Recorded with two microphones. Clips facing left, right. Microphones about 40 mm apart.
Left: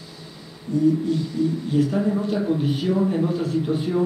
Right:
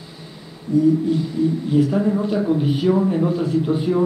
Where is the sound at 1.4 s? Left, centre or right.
Centre.